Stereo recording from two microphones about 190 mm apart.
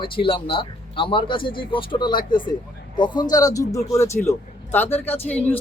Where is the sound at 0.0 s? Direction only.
25° left (ahead or behind).